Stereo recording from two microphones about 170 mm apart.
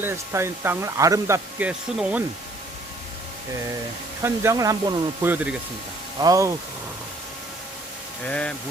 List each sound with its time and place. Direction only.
0.0 s speech: 15° right (ahead or behind)
4.2 s speech: 20° right (ahead or behind)
6.1 s speech: 20° right (ahead or behind)
8.3 s speech: 5° left (ahead or behind)